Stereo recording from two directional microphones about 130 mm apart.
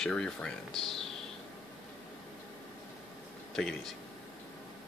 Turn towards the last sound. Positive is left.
turn(degrees=5)  # may be behind; listen again after turning